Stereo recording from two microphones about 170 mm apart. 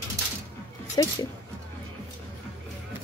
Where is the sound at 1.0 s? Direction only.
25° left (ahead or behind).